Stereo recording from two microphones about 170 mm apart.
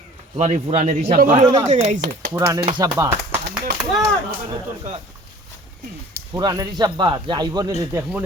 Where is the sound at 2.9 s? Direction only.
15° right (ahead or behind).